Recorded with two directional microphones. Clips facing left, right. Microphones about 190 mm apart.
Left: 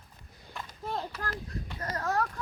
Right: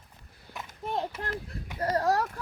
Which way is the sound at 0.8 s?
20° right (ahead or behind).